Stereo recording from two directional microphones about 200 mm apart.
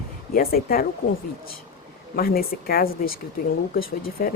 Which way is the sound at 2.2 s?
50° left (ahead or behind).